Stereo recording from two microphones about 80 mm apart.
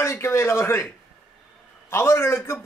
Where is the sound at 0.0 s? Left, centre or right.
Left.